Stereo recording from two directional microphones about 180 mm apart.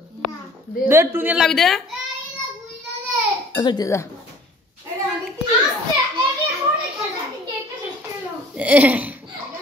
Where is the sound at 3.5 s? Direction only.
25° left (ahead or behind).